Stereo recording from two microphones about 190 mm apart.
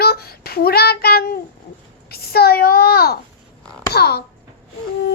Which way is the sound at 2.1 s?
55° left (ahead or behind).